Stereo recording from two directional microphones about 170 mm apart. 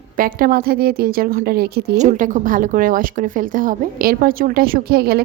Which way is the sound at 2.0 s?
50° right (ahead or behind).